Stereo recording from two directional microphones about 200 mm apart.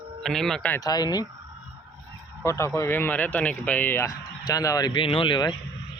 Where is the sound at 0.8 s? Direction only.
20° left (ahead or behind).